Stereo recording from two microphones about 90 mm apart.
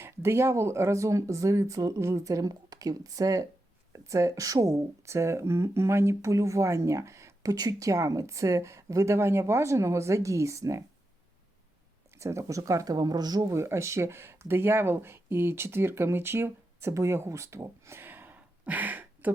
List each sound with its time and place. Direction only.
0.0 s speech: 30° right (ahead or behind)
7.5 s speech: 45° right (ahead or behind)
12.1 s speech: 30° right (ahead or behind); by 13.4 s 50° right (ahead or behind)
13.4 s speech: 30° right (ahead or behind)